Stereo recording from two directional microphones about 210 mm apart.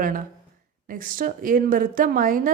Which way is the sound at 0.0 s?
40° right (ahead or behind).